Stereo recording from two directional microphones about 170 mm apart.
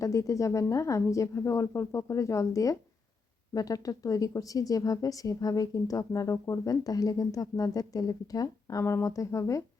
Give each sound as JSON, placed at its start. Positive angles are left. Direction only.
{"t": 0.0, "sound": "speech", "side_deg": 20}